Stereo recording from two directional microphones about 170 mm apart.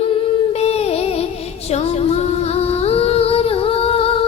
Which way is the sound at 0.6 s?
40° left (ahead or behind).